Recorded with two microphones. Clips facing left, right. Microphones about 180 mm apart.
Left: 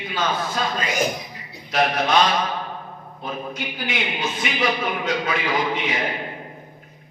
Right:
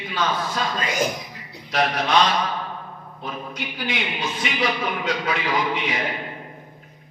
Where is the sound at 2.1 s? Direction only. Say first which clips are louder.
Left 1 dB; 45° left (ahead or behind).